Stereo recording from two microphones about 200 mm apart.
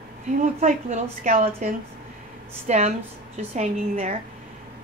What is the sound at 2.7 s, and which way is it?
A woman's voice, 35° right (ahead or behind).